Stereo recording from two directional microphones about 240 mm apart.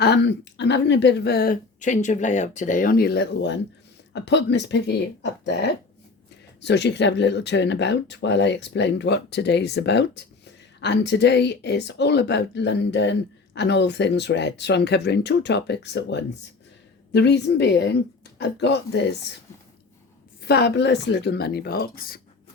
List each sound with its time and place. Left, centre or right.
0.0 s a woman's voice: left
20.4 s speech: left